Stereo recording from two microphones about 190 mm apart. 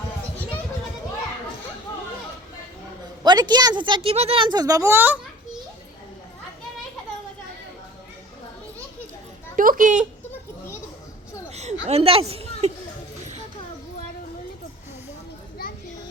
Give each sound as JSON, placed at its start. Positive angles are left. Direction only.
{"t": 3.2, "sound": "speech", "side_deg": -20}
{"t": 9.6, "sound": "a woman's voice", "side_deg": -45}
{"t": 11.9, "sound": "a child's voice", "side_deg": -30}